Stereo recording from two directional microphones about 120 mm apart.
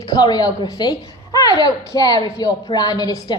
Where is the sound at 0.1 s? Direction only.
35° left (ahead or behind).